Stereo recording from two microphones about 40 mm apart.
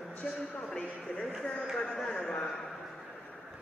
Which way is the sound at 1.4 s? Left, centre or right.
Centre.